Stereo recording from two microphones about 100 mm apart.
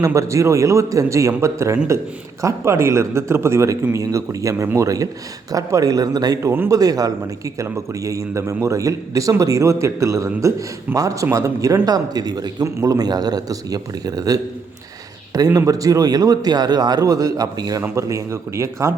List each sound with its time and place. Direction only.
0.0 s a man's voice: 30° right (ahead or behind)
15.5 s speech: 35° right (ahead or behind)